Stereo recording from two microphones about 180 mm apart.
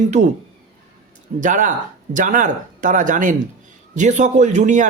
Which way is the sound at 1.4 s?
45° right (ahead or behind).